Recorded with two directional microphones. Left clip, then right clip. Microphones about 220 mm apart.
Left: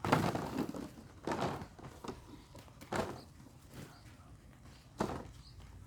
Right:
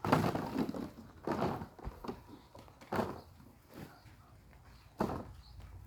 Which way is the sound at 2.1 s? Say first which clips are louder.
Right 2 dB; 10° right (ahead or behind).